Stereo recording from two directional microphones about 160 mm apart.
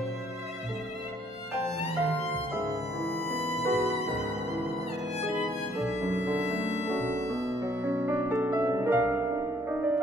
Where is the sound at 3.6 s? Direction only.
15° right (ahead or behind).